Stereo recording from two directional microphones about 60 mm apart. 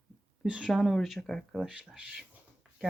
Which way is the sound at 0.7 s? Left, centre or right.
Centre.